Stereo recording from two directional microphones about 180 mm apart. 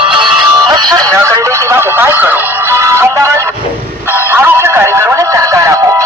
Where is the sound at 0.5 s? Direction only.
20° right (ahead or behind).